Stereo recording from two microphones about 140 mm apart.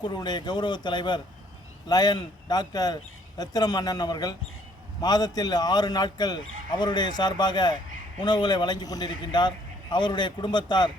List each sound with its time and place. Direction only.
0.0 s speech: 30° left (ahead or behind)